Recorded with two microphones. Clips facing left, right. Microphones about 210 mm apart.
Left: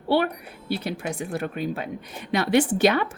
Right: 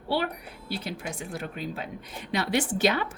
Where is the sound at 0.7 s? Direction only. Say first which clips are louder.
Left 6 dB; 60° left (ahead or behind).